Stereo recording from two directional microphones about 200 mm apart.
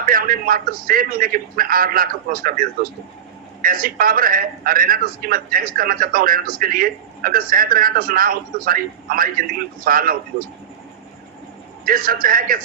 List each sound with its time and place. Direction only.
0.0 s a man's voice: 45° right (ahead or behind)
11.9 s a man's voice: 45° right (ahead or behind)